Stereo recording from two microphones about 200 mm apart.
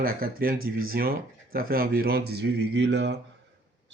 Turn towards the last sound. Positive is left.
turn(degrees=-60)  # may be behind; listen again after turning